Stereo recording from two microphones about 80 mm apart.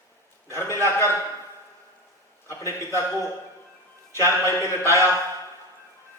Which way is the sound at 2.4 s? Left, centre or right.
Left.